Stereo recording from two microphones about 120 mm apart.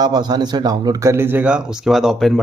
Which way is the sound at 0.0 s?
35° right (ahead or behind).